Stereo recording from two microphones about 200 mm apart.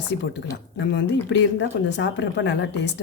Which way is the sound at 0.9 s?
60° left (ahead or behind).